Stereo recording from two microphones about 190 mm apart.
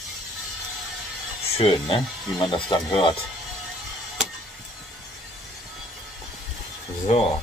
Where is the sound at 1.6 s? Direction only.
25° left (ahead or behind).